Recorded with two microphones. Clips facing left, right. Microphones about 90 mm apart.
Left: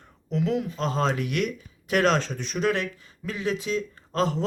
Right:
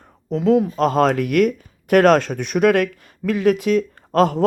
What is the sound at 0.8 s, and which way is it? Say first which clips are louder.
Speech: right 9 dB; 55° right (ahead or behind).